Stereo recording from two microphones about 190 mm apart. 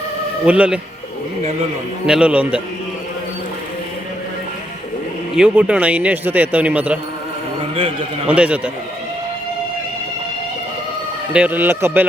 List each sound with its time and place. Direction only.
0.4 s a man's voice: 5° right (ahead or behind)
2.0 s a man's voice: 5° right (ahead or behind)
5.4 s a man's voice: 5° right (ahead or behind)
8.3 s a man's voice: 5° right (ahead or behind)
11.3 s a man's voice: 10° right (ahead or behind)